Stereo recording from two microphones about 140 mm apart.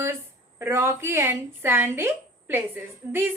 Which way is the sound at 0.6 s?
20° right (ahead or behind).